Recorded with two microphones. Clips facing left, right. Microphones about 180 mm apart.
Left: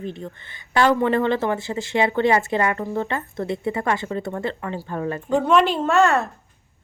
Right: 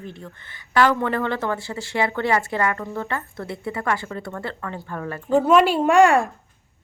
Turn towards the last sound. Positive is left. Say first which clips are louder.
# right 3 dB
turn(degrees=-10)  # may be behind; listen again after turning